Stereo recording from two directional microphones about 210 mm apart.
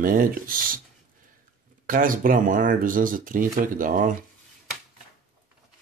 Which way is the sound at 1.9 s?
40° right (ahead or behind).